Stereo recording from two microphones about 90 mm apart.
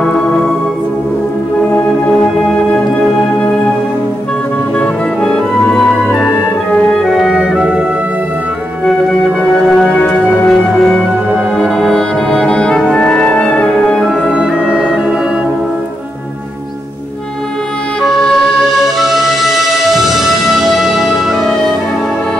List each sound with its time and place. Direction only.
0.0 s music: 10° left (ahead or behind)
4.7 s music: 10° left (ahead or behind); by 7.8 s 10° right (ahead or behind)
9.5 s music: centre (ahead or behind)
9.9 s music: 15° left (ahead or behind)
11.5 s music: 5° left (ahead or behind)
14.3 s music: 10° right (ahead or behind)
18.0 s music: centre (ahead or behind)